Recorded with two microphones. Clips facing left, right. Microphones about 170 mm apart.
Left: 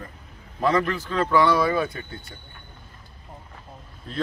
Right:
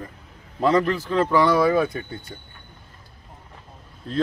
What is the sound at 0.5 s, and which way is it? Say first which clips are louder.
Speech: right 3 dB; 30° right (ahead or behind).